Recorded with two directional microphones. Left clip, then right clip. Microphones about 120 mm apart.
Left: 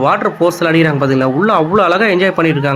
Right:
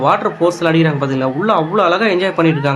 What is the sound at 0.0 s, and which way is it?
Speech, 30° left (ahead or behind).